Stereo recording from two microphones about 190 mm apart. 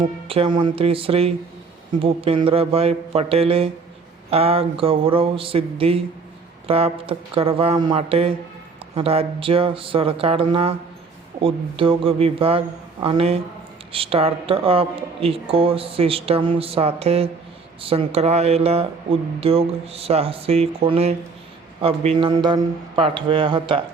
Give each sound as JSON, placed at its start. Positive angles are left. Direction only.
{"t": 0.0, "sound": "speech", "side_deg": -25}